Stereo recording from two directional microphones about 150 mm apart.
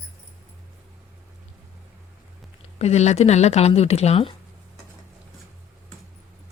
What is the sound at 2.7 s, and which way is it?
Speech, 45° left (ahead or behind).